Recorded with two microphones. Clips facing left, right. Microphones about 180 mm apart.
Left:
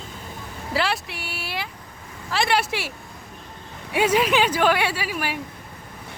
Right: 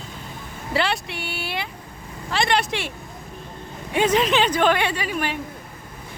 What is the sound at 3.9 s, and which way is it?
Speech, 10° left (ahead or behind).